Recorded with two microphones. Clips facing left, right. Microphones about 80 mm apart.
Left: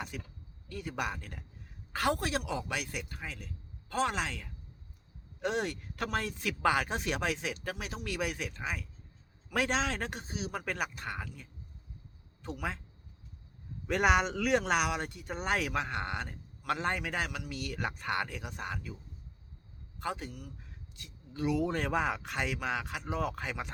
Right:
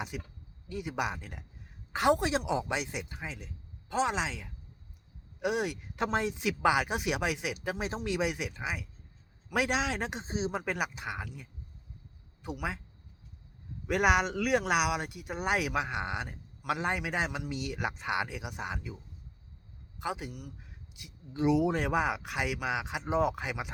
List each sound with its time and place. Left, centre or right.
0.1 s speech: centre
6.0 s speech: right
7.8 s speech: right; by 12.8 s centre
13.8 s speech: centre
20.0 s speech: centre